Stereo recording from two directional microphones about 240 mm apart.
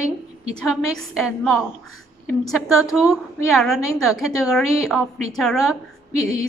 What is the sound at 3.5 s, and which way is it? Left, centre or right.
A woman's voice, centre.